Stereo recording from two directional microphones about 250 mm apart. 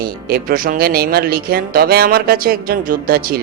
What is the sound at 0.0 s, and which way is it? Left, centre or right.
Speech, right.